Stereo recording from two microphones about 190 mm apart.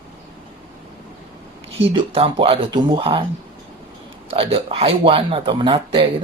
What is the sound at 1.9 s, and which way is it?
Speech, 30° right (ahead or behind).